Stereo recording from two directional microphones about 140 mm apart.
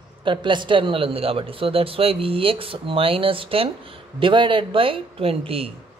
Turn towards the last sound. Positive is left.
turn(degrees=-45)  # may be behind; listen again after turning